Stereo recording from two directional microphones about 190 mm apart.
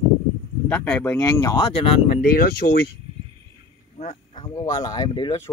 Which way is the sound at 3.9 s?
35° left (ahead or behind).